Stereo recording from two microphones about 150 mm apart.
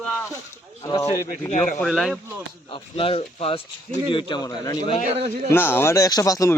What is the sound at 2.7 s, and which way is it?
Speech, 35° left (ahead or behind).